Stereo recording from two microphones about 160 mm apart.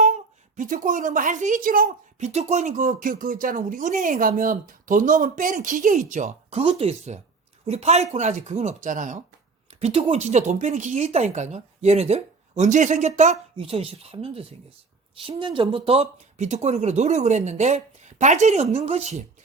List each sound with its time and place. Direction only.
0.5 s speech: 55° right (ahead or behind)
6.6 s speech: 40° right (ahead or behind)